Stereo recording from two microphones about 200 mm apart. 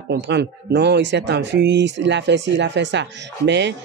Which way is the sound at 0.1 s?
55° right (ahead or behind).